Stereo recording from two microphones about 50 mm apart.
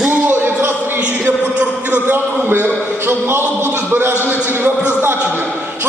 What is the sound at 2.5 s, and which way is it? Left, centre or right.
A man's voice, right.